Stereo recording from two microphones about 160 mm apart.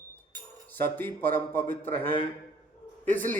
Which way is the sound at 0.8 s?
10° left (ahead or behind).